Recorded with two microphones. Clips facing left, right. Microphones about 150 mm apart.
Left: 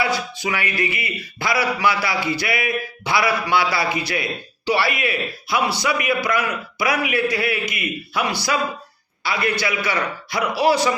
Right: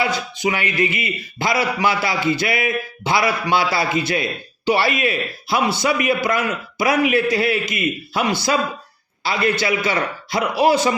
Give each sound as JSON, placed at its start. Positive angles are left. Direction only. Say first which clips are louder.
{"t": 0.0, "sound": "speech", "louder": "right 2 dB", "side_deg": -20}